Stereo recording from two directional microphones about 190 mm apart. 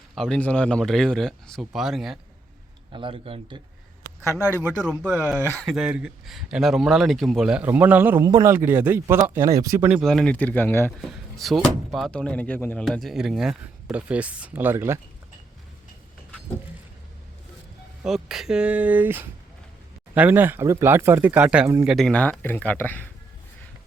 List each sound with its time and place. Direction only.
0.2 s speech: 5° left (ahead or behind)
2.9 s speech: 25° right (ahead or behind)
4.3 s speech: 10° right (ahead or behind)
5.5 s speech: centre (ahead or behind)
10.0 s speech: centre (ahead or behind)
11.1 s speech: centre (ahead or behind)
18.0 s speech: centre (ahead or behind)